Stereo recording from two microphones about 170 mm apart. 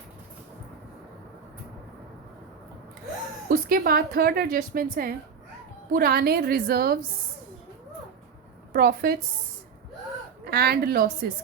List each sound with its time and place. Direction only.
3.5 s a woman's voice: 60° right (ahead or behind)
8.7 s a woman's voice: 60° right (ahead or behind)
10.4 s a woman's voice: 65° right (ahead or behind)